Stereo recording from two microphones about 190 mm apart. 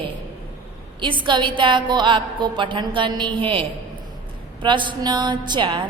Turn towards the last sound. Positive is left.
turn(degrees=-25)  # may be behind; listen again after turning